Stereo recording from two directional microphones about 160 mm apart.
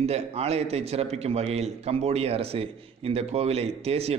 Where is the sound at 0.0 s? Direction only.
40° right (ahead or behind).